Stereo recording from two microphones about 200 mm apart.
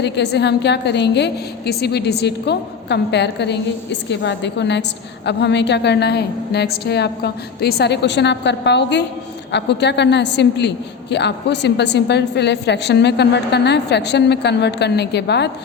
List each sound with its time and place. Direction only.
0.0 s a woman's voice: 60° left (ahead or behind)